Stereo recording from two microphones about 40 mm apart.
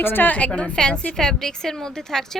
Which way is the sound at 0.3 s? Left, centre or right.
Left.